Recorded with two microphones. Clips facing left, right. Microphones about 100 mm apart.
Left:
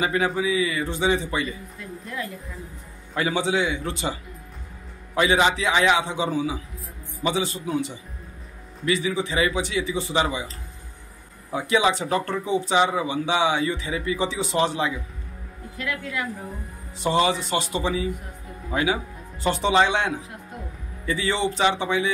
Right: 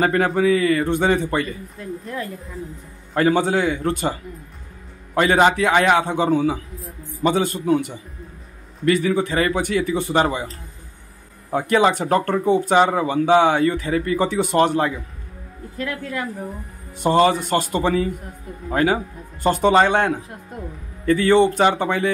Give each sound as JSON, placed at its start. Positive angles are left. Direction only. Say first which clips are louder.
{"t": 0.0, "sound": "speech", "louder": "right 6 dB", "side_deg": -55}
{"t": 1.8, "sound": "a woman's voice", "louder": "right 10 dB", "side_deg": -35}
{"t": 3.2, "sound": "speech", "louder": "right 5 dB", "side_deg": -50}
{"t": 11.5, "sound": "speech", "louder": "right 4 dB", "side_deg": -50}
{"t": 15.8, "sound": "a woman's voice", "louder": "right 3 dB", "side_deg": -40}